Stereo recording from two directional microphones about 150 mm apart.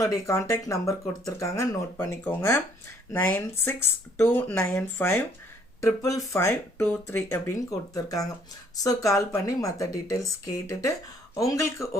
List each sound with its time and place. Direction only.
0.0 s speech: 20° left (ahead or behind)